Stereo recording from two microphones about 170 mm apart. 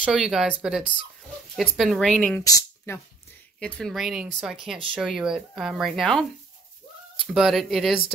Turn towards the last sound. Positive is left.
turn(degrees=0)  # may be behind; listen again after turning